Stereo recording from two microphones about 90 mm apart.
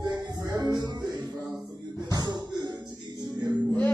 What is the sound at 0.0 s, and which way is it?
Music, 50° right (ahead or behind).